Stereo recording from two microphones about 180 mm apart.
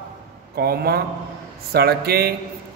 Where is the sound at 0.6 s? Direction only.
60° right (ahead or behind).